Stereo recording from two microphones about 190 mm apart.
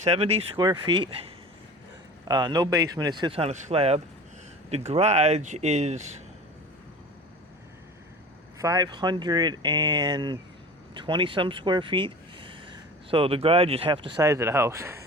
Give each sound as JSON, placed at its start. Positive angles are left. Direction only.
{"t": 0.0, "sound": "speech", "side_deg": -35}
{"t": 2.2, "sound": "speech", "side_deg": -20}
{"t": 8.5, "sound": "speech", "side_deg": -20}
{"t": 14.3, "sound": "speech", "side_deg": -15}